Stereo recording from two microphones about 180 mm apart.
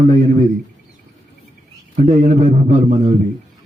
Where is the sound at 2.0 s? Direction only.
40° right (ahead or behind).